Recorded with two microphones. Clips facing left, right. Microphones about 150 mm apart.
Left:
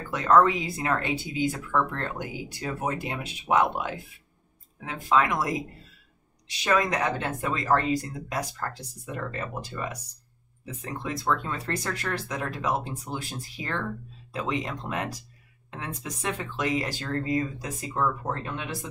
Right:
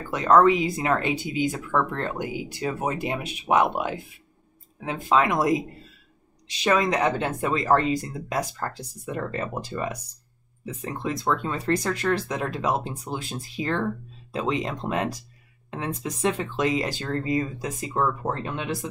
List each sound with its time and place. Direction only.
0.1 s speech: 20° right (ahead or behind)
6.6 s speech: 20° right (ahead or behind)